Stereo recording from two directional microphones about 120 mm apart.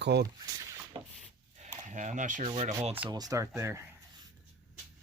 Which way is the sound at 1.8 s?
90° right.